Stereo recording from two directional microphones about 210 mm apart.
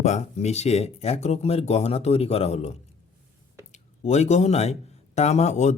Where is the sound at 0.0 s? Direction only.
30° left (ahead or behind).